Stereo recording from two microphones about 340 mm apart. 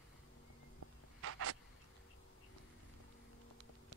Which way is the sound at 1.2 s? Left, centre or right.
Right.